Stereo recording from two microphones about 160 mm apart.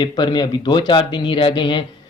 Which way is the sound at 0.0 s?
30° left (ahead or behind).